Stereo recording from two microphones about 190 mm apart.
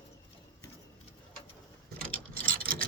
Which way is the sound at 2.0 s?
50° right (ahead or behind).